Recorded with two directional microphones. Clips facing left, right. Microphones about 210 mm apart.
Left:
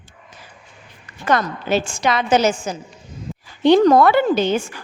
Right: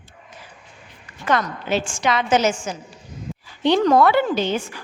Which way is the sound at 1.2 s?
40° left (ahead or behind).